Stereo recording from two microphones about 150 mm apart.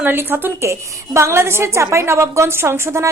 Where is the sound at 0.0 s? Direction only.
15° right (ahead or behind).